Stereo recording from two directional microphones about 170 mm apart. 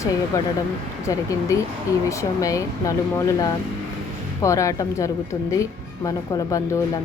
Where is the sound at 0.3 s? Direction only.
15° left (ahead or behind).